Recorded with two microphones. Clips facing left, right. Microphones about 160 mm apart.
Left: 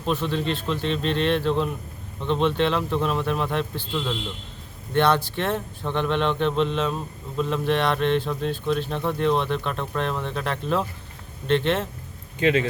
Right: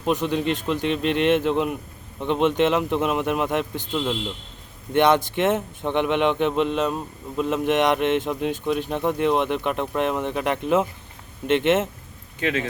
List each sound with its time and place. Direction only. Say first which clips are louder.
0.0 s a man's voice: right 3 dB; 15° right (ahead or behind)
12.4 s speech: left 4 dB; centre (ahead or behind)